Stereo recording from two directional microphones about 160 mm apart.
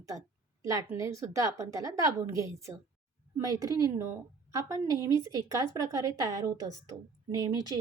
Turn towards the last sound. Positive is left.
turn(degrees=-25)  # may be behind; listen again after turning